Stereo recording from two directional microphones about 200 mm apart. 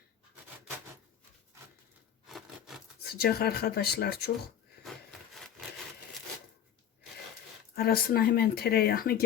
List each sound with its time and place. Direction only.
2.2 s wood: centre (ahead or behind)
3.2 s speech: 50° left (ahead or behind)
5.3 s wood: centre (ahead or behind)
7.8 s speech: 50° left (ahead or behind)